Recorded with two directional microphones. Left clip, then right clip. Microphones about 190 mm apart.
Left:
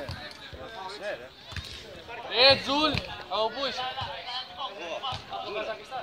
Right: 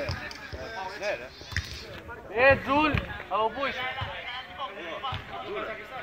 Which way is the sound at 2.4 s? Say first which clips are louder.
Even; 40° left (ahead or behind).